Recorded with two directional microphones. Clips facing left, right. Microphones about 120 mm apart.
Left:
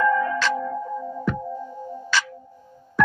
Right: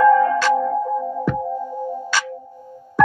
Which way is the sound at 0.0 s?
35° right (ahead or behind).